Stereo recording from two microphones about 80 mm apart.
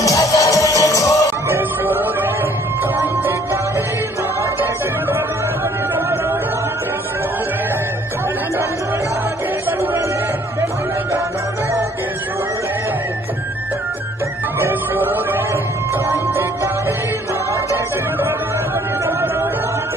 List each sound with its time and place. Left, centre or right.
0.0 s music: left
1.5 s music: right
9.7 s chatter: right
14.6 s music: right